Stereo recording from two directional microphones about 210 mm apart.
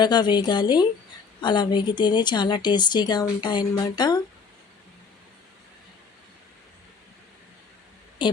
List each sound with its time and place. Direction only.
0.0 s speech: 20° left (ahead or behind)